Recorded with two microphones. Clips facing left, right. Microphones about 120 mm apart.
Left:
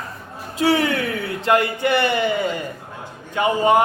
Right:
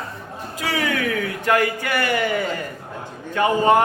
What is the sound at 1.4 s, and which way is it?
A man's voice, 25° left (ahead or behind).